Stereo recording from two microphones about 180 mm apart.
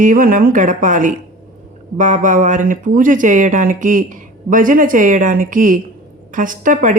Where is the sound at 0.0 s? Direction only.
50° right (ahead or behind).